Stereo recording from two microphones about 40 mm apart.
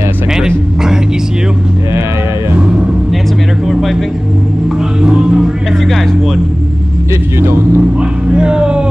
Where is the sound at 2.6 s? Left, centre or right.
Centre.